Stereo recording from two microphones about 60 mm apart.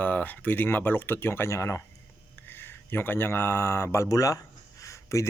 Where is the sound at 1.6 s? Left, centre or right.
Left.